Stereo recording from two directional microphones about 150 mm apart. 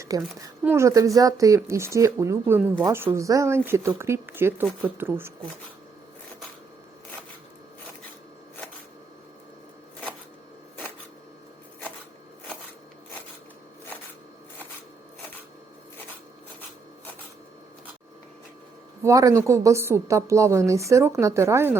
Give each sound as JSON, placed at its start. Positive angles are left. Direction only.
{"t": 0.0, "sound": "a woman's voice", "side_deg": -25}
{"t": 19.0, "sound": "a woman's voice", "side_deg": -20}